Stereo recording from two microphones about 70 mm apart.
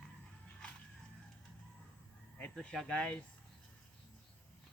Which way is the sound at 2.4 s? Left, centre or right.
Centre.